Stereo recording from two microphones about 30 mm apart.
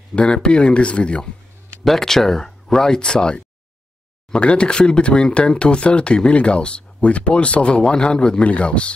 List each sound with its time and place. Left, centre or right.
0.1 s speech: left
1.9 s speech: centre; by 8.9 s left